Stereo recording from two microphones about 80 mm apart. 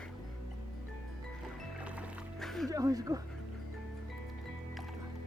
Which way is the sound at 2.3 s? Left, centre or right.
Centre.